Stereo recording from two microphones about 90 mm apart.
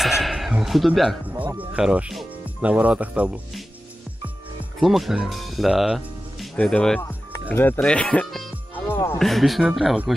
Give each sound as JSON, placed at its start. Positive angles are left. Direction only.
{"t": 0.0, "sound": "a sound", "side_deg": 0}
{"t": 1.7, "sound": "speech", "side_deg": -15}
{"t": 4.7, "sound": "speech", "side_deg": 0}
{"t": 6.5, "sound": "speech", "side_deg": 10}
{"t": 7.0, "sound": "music", "side_deg": 30}
{"t": 7.5, "sound": "speech", "side_deg": 25}
{"t": 7.8, "sound": "speech", "side_deg": 10}
{"t": 8.7, "sound": "music", "side_deg": 25}
{"t": 9.2, "sound": "speech", "side_deg": 0}